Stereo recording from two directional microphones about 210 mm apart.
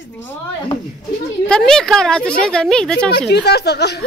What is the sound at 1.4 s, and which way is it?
Speech, 5° left (ahead or behind).